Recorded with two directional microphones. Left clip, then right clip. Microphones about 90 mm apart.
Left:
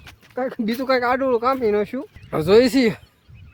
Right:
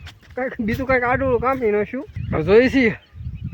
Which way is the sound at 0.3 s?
20° left (ahead or behind).